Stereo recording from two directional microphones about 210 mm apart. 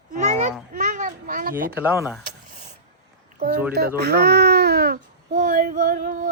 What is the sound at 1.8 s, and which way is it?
Speech, 10° right (ahead or behind).